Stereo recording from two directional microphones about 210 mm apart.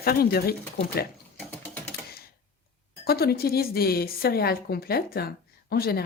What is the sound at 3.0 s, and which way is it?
A woman's voice, 45° left (ahead or behind).